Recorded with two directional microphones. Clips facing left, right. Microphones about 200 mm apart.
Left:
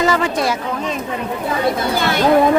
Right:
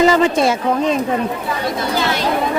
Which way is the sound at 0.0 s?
25° right (ahead or behind).